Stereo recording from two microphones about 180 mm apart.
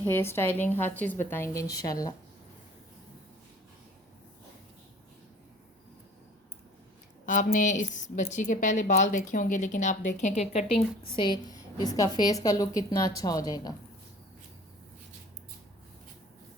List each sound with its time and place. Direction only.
0.0 s a woman's voice: 10° left (ahead or behind)
7.3 s a woman's voice: 45° left (ahead or behind)
11.2 s a woman's voice: 25° left (ahead or behind)